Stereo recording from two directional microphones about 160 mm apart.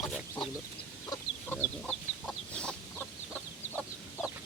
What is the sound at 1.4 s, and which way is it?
Chicken, 10° left (ahead or behind).